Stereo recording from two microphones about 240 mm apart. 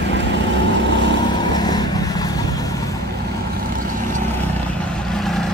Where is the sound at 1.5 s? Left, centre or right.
Centre.